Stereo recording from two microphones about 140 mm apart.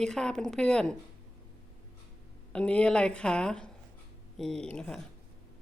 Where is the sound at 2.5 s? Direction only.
10° left (ahead or behind).